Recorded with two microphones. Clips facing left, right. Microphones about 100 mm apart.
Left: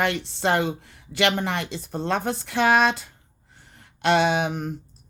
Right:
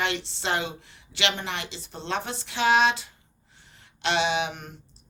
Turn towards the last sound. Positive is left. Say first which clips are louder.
# left 4 dB
turn(degrees=40)  # may be behind; listen again after turning